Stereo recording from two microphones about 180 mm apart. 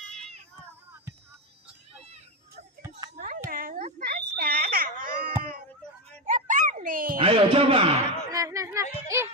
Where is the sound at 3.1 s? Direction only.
50° right (ahead or behind).